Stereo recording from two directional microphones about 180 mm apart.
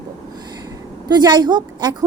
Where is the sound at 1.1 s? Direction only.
25° right (ahead or behind).